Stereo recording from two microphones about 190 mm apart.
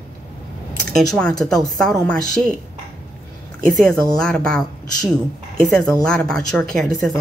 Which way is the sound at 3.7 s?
5° left (ahead or behind).